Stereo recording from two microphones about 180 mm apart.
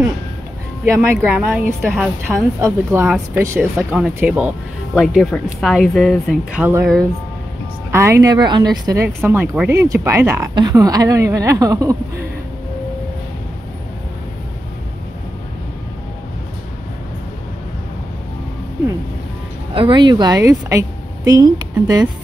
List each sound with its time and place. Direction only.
1.2 s speech: 10° right (ahead or behind)
2.6 s a woman's voice: 10° right (ahead or behind)
7.9 s a woman's voice: 15° right (ahead or behind)
19.7 s a woman's voice: 30° right (ahead or behind)